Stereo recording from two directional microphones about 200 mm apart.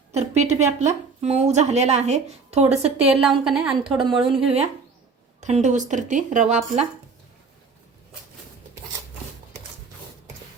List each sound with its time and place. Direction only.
0.2 s a woman's voice: 35° right (ahead or behind)
3.0 s a woman's voice: 5° right (ahead or behind)
3.9 s a woman's voice: 25° right (ahead or behind)